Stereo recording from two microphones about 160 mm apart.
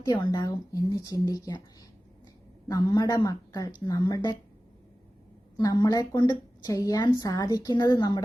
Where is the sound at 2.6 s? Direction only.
20° left (ahead or behind).